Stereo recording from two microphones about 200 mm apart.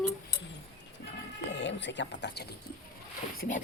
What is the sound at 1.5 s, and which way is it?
Speech, 60° left (ahead or behind).